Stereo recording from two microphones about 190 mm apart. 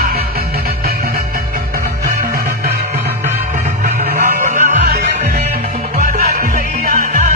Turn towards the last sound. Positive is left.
turn(degrees=-45)  # may be behind; listen again after turning